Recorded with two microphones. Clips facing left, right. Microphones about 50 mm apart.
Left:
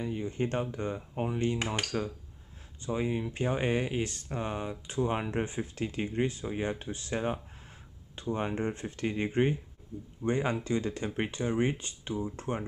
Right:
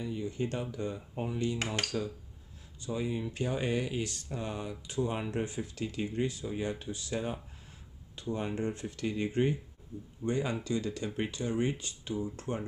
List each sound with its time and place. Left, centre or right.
0.0 s speech: left